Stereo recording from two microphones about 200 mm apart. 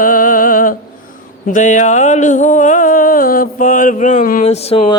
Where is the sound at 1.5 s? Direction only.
40° left (ahead or behind).